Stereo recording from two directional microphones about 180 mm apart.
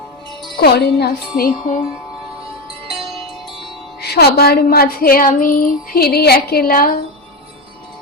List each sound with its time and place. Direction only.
0.6 s a woman's voice: 60° left (ahead or behind)
4.0 s a woman's voice: 60° left (ahead or behind)